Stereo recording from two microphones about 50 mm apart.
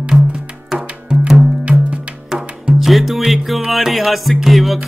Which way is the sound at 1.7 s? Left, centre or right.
Right.